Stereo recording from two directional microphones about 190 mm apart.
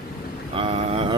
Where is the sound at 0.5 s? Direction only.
30° right (ahead or behind).